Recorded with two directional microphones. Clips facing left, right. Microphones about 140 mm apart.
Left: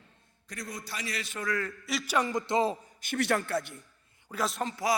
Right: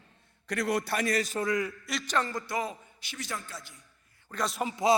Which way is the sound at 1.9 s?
Centre (ahead or behind).